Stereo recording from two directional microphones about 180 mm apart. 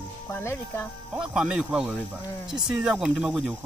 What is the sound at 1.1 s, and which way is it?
Speech, 5° right (ahead or behind).